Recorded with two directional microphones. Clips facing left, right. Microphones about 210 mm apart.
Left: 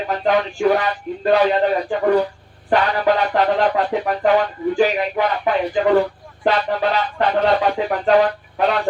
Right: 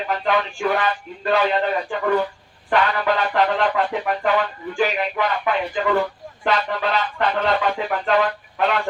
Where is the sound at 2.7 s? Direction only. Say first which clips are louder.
Left 3 dB; 35° left (ahead or behind).